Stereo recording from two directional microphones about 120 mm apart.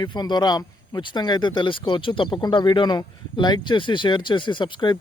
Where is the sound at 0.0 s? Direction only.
35° left (ahead or behind).